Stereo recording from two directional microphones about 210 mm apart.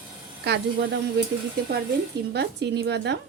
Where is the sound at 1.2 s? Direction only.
50° right (ahead or behind).